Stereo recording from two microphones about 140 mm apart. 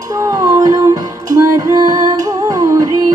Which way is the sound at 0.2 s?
25° right (ahead or behind).